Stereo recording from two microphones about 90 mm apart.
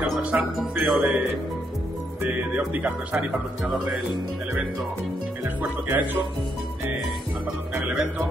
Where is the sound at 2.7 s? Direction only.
15° right (ahead or behind).